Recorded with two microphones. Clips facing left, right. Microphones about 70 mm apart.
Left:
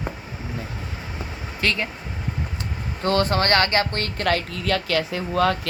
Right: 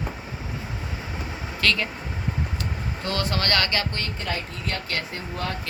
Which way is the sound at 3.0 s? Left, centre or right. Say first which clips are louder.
Left 7 dB; left.